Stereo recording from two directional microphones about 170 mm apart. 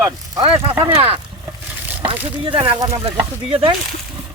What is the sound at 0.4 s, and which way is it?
Speech, 35° right (ahead or behind).